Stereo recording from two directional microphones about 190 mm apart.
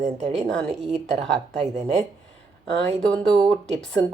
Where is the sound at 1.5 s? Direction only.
35° right (ahead or behind).